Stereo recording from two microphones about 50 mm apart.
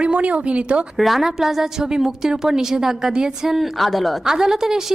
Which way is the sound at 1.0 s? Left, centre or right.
Centre.